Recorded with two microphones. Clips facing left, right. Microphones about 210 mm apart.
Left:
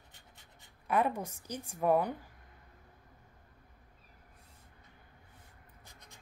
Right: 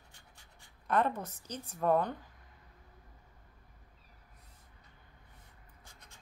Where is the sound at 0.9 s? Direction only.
10° left (ahead or behind).